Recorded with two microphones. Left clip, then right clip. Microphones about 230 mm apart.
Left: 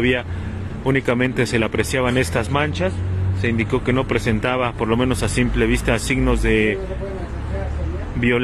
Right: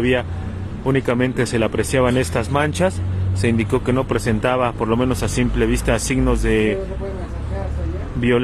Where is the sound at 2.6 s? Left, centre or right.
Right; by 6.7 s centre.